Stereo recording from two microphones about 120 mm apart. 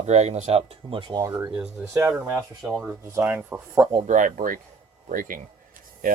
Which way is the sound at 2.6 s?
Centre (ahead or behind).